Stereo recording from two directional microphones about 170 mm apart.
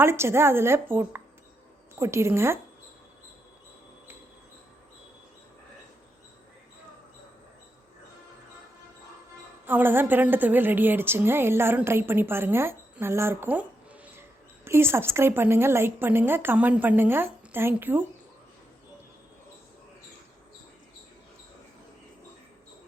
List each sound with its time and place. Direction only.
0.0 s a woman's voice: 15° right (ahead or behind)
9.6 s a woman's voice: 10° right (ahead or behind)